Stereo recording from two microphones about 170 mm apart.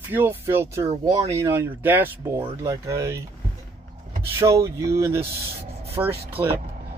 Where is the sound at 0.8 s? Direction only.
40° right (ahead or behind).